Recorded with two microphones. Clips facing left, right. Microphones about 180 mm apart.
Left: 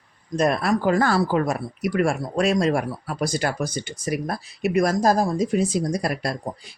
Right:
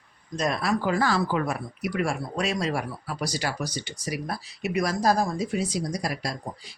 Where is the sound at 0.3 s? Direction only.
55° left (ahead or behind).